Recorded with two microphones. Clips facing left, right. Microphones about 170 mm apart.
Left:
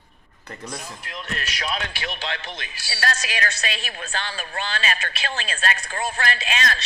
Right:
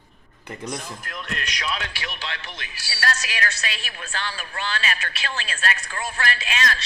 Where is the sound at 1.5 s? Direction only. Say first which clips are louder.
Left 1 dB; 40° left (ahead or behind).